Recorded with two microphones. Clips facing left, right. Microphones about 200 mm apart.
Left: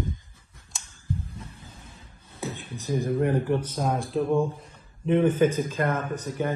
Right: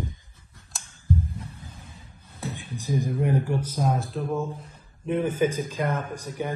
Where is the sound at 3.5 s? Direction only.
5° right (ahead or behind).